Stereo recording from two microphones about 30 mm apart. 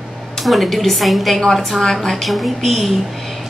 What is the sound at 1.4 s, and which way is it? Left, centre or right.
Speech, centre.